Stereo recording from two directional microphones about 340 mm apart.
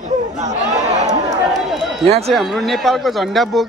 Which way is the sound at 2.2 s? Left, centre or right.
Centre.